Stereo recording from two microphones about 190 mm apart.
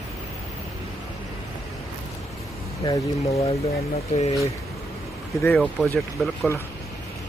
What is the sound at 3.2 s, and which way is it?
Speech, 30° left (ahead or behind).